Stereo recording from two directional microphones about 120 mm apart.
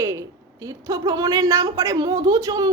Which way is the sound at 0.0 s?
25° right (ahead or behind).